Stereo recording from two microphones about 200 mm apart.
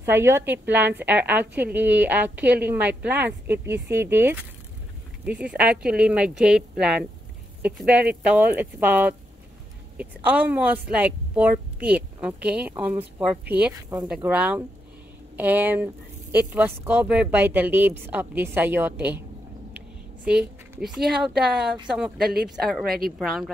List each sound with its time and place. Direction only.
0.0 s a woman's voice: 15° right (ahead or behind)
20.2 s a woman's voice: 5° right (ahead or behind)
22.8 s speech: 50° right (ahead or behind)
23.1 s speech: centre (ahead or behind)